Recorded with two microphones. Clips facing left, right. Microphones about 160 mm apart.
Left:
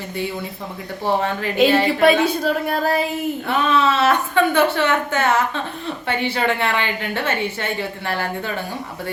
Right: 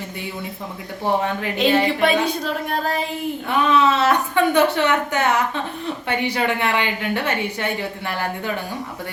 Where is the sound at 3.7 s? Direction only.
20° right (ahead or behind).